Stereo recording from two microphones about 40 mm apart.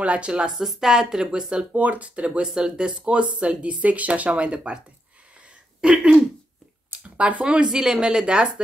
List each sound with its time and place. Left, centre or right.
0.0 s speech: right
0.5 s speech: centre
1.7 s speech: right
2.4 s speech: centre
5.8 s throat clearing: centre
7.2 s speech: right